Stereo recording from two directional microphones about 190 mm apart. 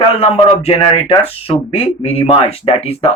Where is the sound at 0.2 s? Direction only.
30° left (ahead or behind).